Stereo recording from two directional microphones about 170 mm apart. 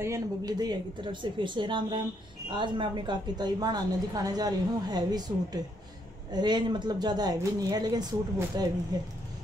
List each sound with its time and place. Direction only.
0.0 s a woman's voice: 20° right (ahead or behind)